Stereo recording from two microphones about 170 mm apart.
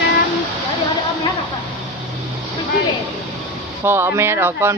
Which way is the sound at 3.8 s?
15° right (ahead or behind).